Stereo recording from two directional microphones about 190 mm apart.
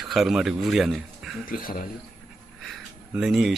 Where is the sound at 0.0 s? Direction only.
Centre (ahead or behind).